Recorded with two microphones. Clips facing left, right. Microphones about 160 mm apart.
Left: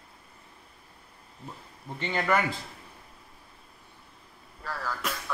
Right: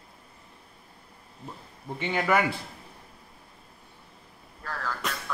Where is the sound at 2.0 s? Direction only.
5° right (ahead or behind).